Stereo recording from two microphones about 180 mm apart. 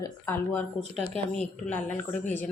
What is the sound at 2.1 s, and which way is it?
Speech, 40° left (ahead or behind).